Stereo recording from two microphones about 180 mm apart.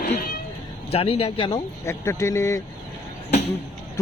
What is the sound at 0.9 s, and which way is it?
Speech, 30° left (ahead or behind).